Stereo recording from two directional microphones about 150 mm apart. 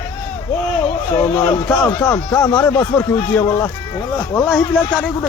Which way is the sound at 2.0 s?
20° left (ahead or behind).